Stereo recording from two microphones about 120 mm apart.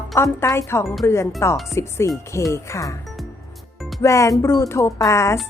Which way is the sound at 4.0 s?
25° left (ahead or behind).